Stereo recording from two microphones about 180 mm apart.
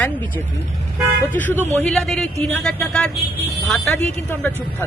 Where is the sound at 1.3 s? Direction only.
10° left (ahead or behind).